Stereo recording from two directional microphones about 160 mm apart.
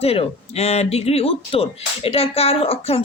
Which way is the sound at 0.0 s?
40° left (ahead or behind).